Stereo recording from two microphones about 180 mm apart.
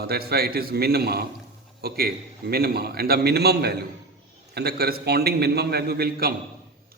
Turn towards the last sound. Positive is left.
turn(degrees=-60)  # may be behind; listen again after turning